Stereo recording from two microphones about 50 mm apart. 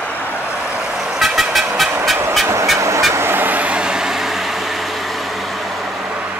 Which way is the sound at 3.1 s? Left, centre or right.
Right.